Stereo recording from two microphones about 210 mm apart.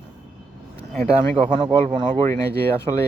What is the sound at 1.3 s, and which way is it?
Speech, 25° right (ahead or behind).